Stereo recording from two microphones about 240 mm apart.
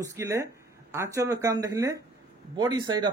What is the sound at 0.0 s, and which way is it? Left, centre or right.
Speech, centre.